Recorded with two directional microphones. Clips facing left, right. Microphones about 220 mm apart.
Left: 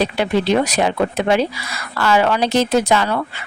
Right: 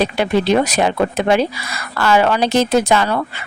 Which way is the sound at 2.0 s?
50° right (ahead or behind).